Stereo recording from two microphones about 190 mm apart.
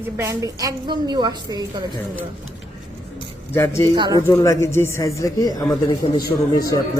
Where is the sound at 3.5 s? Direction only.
15° left (ahead or behind).